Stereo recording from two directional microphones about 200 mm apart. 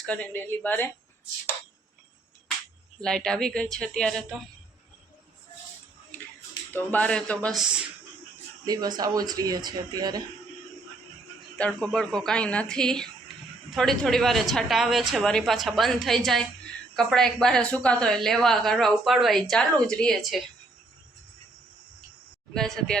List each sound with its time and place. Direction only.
0.0 s a woman's voice: 5° left (ahead or behind)
3.0 s a woman's voice: 5° left (ahead or behind)
6.1 s a sound: 10° left (ahead or behind)
8.6 s speech: 20° right (ahead or behind)
11.5 s a woman's voice: 5° left (ahead or behind)
22.5 s a woman's voice: centre (ahead or behind)